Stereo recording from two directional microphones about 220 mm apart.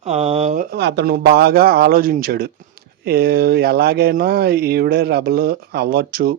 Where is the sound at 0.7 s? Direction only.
50° right (ahead or behind).